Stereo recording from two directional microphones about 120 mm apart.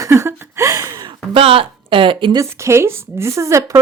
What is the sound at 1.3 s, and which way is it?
Speech, 50° right (ahead or behind).